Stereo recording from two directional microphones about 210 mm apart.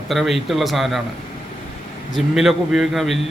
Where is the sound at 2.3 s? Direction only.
Centre (ahead or behind).